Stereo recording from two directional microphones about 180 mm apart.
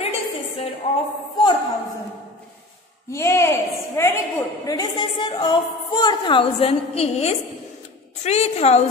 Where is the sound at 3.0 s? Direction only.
15° left (ahead or behind).